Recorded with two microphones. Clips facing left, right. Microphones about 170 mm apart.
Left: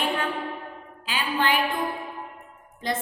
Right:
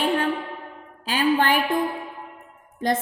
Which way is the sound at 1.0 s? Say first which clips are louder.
Right 5 dB; 40° right (ahead or behind).